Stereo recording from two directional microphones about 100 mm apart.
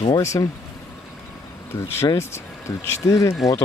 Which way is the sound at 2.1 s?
25° left (ahead or behind).